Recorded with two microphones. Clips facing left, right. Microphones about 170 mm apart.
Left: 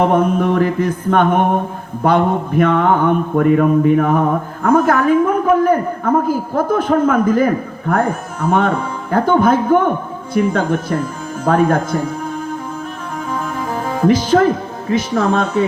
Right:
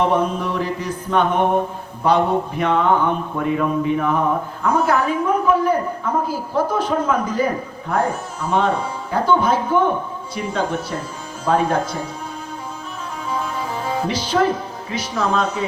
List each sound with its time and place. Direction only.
0.0 s a man's voice: 55° left (ahead or behind)
13.2 s music: 50° left (ahead or behind)